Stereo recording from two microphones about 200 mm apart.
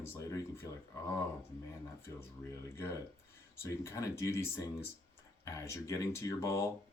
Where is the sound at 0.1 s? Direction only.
15° left (ahead or behind).